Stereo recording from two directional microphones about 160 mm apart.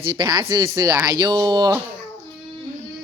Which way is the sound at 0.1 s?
25° right (ahead or behind).